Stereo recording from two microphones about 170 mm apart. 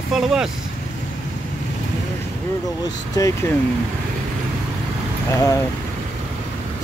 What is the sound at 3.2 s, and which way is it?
Speech, 20° left (ahead or behind).